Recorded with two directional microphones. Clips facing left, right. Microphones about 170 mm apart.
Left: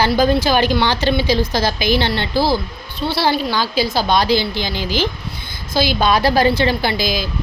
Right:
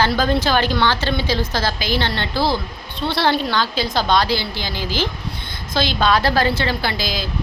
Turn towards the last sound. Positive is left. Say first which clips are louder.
# left 4 dB
turn(degrees=15)  # may be behind; listen again after turning